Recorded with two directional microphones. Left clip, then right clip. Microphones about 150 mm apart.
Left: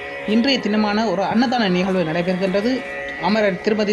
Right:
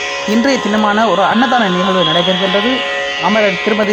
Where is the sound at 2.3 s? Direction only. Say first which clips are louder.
Right 7 dB; 40° right (ahead or behind).